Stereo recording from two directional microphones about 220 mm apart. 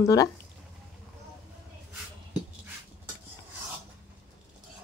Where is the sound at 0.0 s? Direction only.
15° left (ahead or behind).